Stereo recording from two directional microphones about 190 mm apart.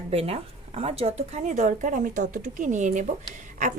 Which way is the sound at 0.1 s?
35° right (ahead or behind).